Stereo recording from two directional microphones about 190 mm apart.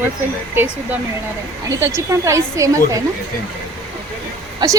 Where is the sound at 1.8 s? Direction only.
15° right (ahead or behind).